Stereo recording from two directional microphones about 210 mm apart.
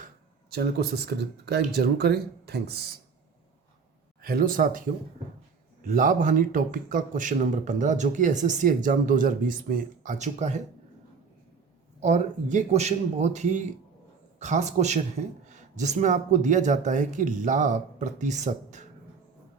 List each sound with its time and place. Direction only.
0.5 s speech: 50° right (ahead or behind)
4.2 s speech: 45° right (ahead or behind)
5.8 s a man's voice: 40° right (ahead or behind)
11.9 s a man's voice: 35° right (ahead or behind)